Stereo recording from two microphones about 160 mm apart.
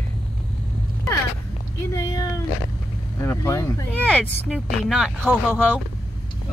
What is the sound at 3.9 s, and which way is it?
Speech, 10° left (ahead or behind).